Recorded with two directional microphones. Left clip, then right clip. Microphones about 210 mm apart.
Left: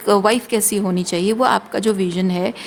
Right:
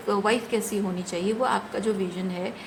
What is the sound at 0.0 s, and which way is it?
A woman's voice, 55° left (ahead or behind).